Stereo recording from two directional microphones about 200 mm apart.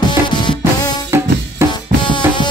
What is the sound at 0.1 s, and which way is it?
Music, 20° left (ahead or behind).